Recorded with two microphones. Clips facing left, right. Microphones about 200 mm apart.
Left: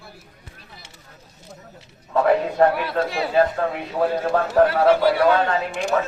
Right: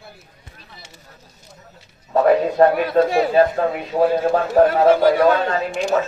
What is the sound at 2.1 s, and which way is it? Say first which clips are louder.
A man's voice: right 3 dB; 45° right (ahead or behind).